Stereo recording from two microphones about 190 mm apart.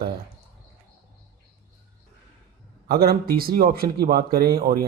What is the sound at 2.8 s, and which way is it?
Speech, 55° right (ahead or behind).